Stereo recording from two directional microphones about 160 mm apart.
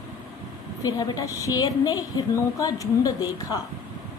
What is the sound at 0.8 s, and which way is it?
A woman's voice, 25° left (ahead or behind).